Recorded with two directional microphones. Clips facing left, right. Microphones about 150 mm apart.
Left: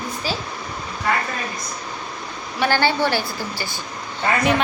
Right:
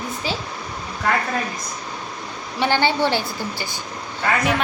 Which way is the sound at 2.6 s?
20° right (ahead or behind).